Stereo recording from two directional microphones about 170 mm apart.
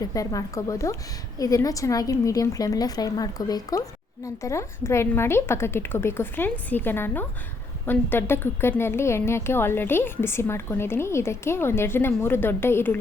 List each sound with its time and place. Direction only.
0.0 s a woman's voice: 20° left (ahead or behind)